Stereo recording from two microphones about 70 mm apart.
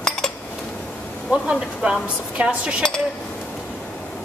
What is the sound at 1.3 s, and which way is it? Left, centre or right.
A woman's voice, centre.